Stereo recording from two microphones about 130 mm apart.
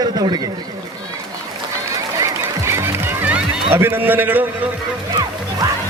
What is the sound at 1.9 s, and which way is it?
Music, 25° right (ahead or behind).